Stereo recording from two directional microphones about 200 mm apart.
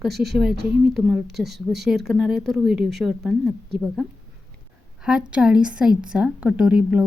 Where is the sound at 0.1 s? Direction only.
55° right (ahead or behind).